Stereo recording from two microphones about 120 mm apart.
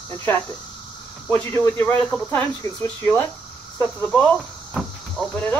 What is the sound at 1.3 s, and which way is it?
Speech, 15° left (ahead or behind).